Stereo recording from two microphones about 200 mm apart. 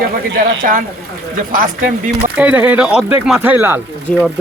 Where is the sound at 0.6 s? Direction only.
45° right (ahead or behind).